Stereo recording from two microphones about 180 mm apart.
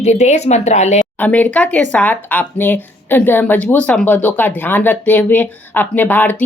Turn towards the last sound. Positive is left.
turn(degrees=10)  # may be behind; listen again after turning